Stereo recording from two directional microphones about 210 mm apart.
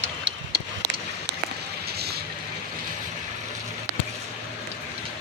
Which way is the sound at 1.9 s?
50° right (ahead or behind).